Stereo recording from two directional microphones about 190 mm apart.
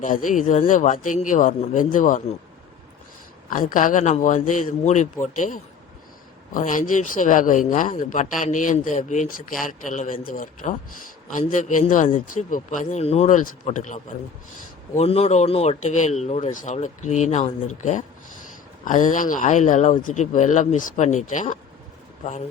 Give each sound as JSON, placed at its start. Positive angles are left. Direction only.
{"t": 0.0, "sound": "speech", "side_deg": 45}
{"t": 3.5, "sound": "speech", "side_deg": 45}